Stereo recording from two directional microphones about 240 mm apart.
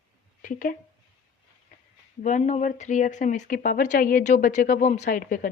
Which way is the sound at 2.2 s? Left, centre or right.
Left.